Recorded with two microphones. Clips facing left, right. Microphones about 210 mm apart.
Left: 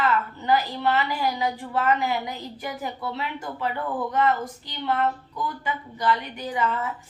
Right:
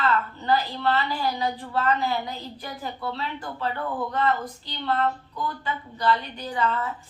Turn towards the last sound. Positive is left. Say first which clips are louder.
# even
turn(degrees=15)  # may be behind; listen again after turning